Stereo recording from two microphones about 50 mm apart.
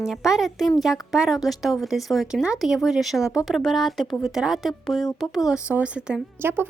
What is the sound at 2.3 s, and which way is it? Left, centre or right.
Speech, centre.